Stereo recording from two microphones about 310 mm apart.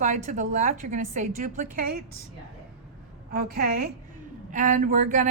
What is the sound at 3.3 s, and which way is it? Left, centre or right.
A woman's voice, right.